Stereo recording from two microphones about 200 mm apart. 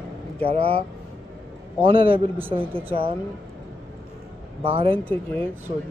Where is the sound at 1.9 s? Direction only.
25° right (ahead or behind).